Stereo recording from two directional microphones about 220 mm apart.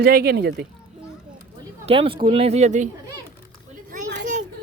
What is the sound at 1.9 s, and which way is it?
Speech, 25° right (ahead or behind).